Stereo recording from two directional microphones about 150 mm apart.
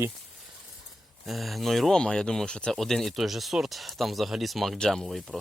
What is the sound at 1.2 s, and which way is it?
Speech, centre (ahead or behind).